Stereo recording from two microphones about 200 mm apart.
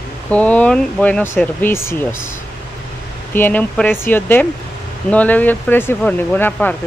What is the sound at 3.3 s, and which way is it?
Speech, 10° left (ahead or behind).